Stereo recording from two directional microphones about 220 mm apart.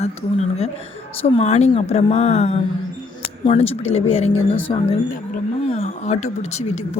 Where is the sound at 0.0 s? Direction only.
30° left (ahead or behind).